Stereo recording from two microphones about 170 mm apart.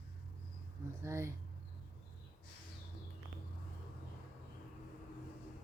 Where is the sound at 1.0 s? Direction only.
15° right (ahead or behind).